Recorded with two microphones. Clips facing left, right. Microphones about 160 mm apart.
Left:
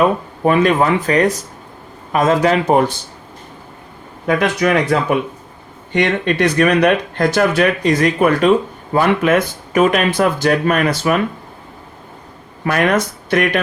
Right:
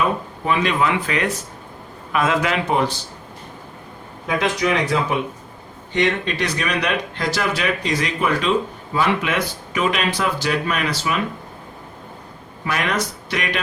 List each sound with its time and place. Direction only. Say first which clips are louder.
0.4 s speech: left 7 dB; 50° left (ahead or behind)
4.3 s speech: left 5 dB; 55° left (ahead or behind)
12.6 s speech: left 7 dB; 50° left (ahead or behind)